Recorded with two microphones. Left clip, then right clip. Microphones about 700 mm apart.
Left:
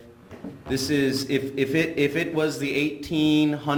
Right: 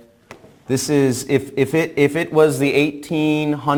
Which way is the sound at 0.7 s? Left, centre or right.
Right.